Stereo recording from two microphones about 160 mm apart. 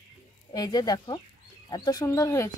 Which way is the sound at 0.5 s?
25° left (ahead or behind).